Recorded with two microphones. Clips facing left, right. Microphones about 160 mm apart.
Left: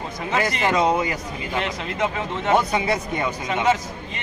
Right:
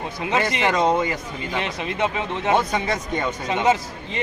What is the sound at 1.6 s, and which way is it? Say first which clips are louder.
Speech: even; 20° right (ahead or behind).